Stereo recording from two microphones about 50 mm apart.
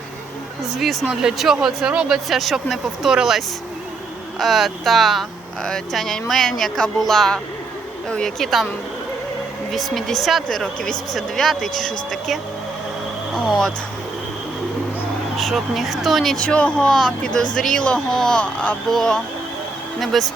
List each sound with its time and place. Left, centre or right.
1.1 s speech: centre
2.4 s speech: centre
3.1 s speech: centre
9.7 s speech: centre
10.6 s speech: centre
11.1 s speech: centre
15.4 s speech: centre
16.4 s speech: left; by 20.3 s centre